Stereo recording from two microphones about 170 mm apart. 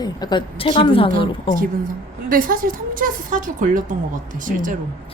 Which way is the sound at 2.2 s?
55° right (ahead or behind).